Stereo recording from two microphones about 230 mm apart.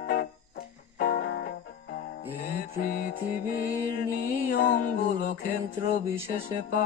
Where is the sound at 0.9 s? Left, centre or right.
Left.